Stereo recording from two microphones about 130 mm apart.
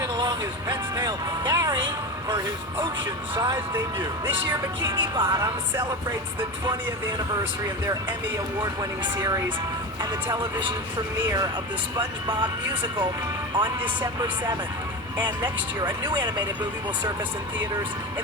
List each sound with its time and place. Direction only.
0.0 s music: 30° right (ahead or behind)
3.3 s speech: 30° right (ahead or behind)
4.9 s speech: 35° right (ahead or behind)
8.6 s speech: 30° right (ahead or behind)
11.9 s speech: 40° right (ahead or behind)
13.5 s speech: 35° right (ahead or behind)